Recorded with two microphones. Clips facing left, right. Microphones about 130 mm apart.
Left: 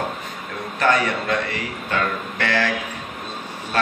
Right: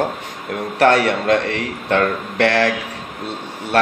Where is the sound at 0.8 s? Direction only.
85° right.